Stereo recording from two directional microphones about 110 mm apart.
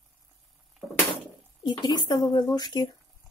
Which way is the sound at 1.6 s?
45° left (ahead or behind).